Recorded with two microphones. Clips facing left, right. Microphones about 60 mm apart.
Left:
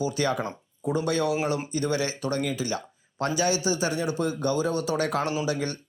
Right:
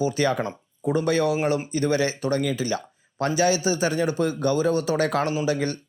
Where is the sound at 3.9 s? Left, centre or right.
Right.